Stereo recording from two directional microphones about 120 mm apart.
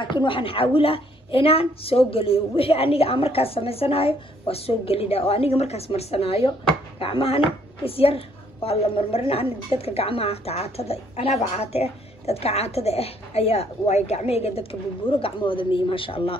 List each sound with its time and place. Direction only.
0.0 s a woman's voice: 40° left (ahead or behind)